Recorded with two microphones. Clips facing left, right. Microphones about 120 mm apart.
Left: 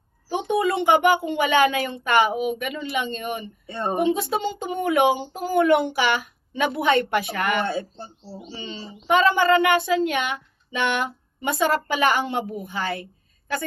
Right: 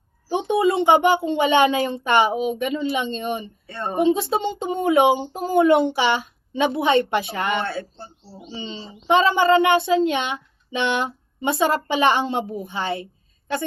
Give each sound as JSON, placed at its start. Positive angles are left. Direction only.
{"t": 0.3, "sound": "speech", "side_deg": -20}
{"t": 3.7, "sound": "speech", "side_deg": 15}
{"t": 3.9, "sound": "speech", "side_deg": -25}
{"t": 7.6, "sound": "speech", "side_deg": 15}
{"t": 8.4, "sound": "speech", "side_deg": -20}